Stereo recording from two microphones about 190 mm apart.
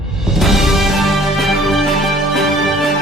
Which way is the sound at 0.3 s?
Centre (ahead or behind).